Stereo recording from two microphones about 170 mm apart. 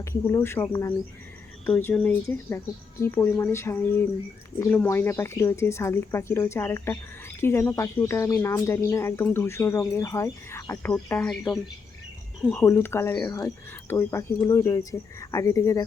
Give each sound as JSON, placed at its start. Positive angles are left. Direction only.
{"t": 0.0, "sound": "speech", "side_deg": 15}